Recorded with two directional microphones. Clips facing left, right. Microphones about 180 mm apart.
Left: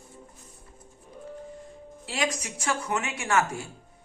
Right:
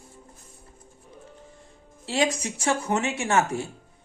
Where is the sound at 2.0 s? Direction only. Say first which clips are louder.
Right 5 dB; 25° right (ahead or behind).